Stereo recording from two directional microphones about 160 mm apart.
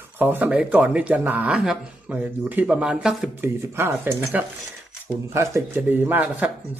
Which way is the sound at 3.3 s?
15° right (ahead or behind).